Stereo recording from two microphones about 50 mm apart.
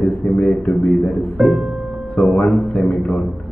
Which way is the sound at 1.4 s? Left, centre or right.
Centre.